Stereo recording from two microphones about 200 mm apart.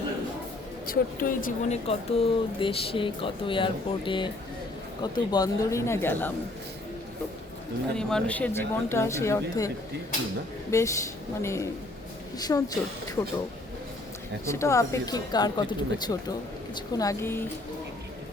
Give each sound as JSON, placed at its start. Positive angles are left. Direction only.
{"t": 0.9, "sound": "speech", "side_deg": 45}
{"t": 1.9, "sound": "speech", "side_deg": 30}
{"t": 7.9, "sound": "speech", "side_deg": 5}
{"t": 14.4, "sound": "speech", "side_deg": 15}